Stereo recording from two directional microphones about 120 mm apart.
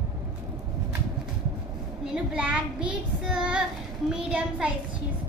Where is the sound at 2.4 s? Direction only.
10° right (ahead or behind).